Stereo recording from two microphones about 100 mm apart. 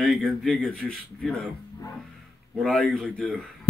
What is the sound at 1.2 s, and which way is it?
Speech, centre (ahead or behind).